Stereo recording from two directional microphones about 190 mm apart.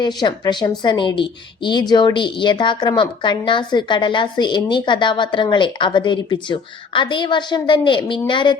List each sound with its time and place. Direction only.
0.0 s a woman's voice: 20° left (ahead or behind)